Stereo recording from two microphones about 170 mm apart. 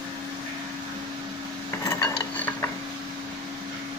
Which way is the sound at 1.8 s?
20° left (ahead or behind).